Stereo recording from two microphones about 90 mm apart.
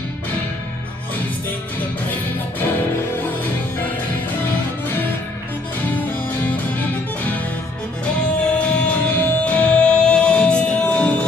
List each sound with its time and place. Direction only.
6.2 s music: 15° left (ahead or behind)